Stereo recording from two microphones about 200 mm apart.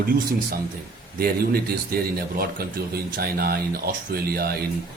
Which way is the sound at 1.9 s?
50° right (ahead or behind).